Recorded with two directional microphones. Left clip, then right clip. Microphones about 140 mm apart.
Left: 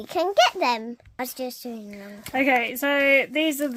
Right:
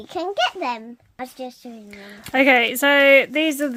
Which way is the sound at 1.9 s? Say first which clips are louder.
Right 1 dB; 45° left (ahead or behind).